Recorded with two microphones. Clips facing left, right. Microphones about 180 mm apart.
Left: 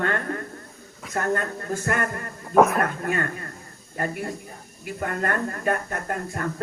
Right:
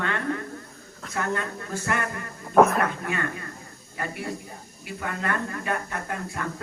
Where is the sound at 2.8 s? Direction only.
45° left (ahead or behind).